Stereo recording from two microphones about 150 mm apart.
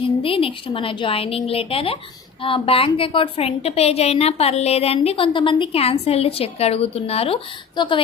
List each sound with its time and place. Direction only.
0.0 s a woman's voice: 35° left (ahead or behind)